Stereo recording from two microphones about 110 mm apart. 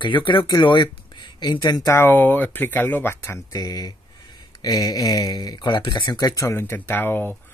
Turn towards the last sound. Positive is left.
turn(degrees=20)  # may be behind; listen again after turning